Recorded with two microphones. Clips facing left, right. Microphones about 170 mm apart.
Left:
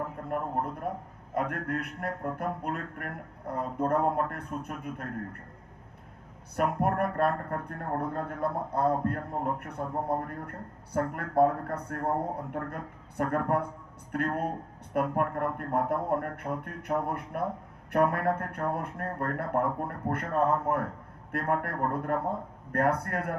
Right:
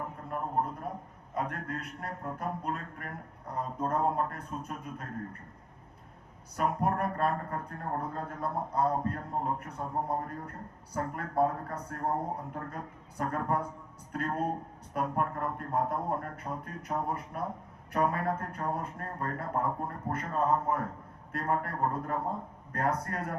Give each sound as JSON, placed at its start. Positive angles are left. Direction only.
{"t": 0.3, "sound": "speech", "side_deg": 55}
{"t": 6.6, "sound": "speech", "side_deg": 60}